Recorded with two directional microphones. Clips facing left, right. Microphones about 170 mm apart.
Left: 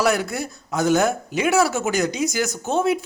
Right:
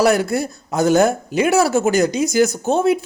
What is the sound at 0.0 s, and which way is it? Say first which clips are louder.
Speech: right 5 dB; 35° right (ahead or behind).